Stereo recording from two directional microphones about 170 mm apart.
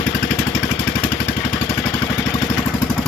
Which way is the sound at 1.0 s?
15° left (ahead or behind).